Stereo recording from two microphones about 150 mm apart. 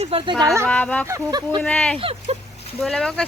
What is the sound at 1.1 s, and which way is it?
Speech, 25° right (ahead or behind).